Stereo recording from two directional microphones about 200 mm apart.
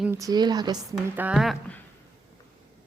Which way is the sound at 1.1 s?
5° right (ahead or behind).